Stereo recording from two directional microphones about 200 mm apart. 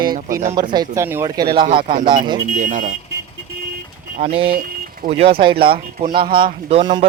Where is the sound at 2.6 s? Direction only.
40° right (ahead or behind).